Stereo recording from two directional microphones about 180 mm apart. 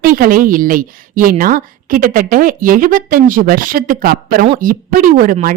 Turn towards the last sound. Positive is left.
turn(degrees=-50)  # may be behind; listen again after turning